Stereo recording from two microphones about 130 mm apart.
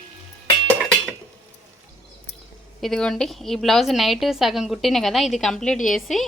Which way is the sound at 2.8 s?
5° left (ahead or behind).